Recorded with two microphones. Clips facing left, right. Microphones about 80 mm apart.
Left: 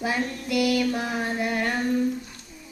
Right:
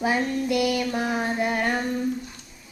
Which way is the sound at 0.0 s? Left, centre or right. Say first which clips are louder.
Right 4 dB; right.